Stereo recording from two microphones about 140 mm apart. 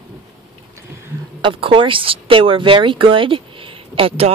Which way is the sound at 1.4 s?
40° right (ahead or behind).